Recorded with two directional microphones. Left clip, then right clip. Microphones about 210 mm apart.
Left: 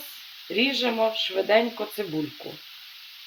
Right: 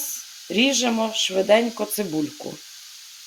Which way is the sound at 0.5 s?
45° right (ahead or behind).